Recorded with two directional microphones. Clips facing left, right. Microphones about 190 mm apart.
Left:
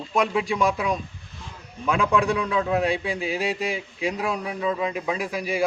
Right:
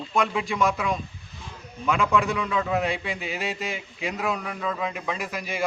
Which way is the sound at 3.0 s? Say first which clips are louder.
Left 4 dB; 10° left (ahead or behind).